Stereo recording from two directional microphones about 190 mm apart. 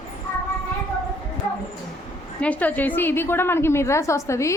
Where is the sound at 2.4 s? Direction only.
10° left (ahead or behind).